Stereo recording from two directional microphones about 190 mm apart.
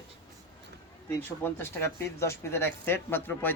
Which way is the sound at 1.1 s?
10° left (ahead or behind).